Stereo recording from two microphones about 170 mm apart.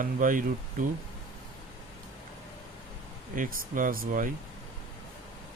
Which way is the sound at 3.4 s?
55° right (ahead or behind).